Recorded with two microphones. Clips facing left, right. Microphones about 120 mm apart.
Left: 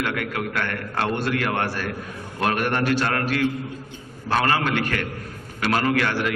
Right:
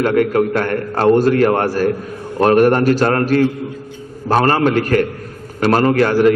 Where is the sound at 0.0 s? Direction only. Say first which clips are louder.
Right 12 dB; 40° right (ahead or behind).